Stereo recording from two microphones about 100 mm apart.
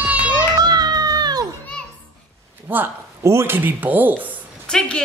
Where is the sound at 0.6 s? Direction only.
40° right (ahead or behind).